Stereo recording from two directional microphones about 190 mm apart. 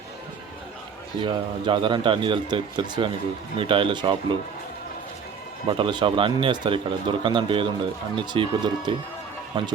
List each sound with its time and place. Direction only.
1.2 s speech: 25° right (ahead or behind)
5.6 s speech: 25° right (ahead or behind)